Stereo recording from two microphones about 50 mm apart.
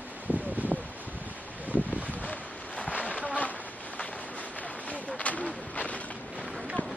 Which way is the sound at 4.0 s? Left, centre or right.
Left.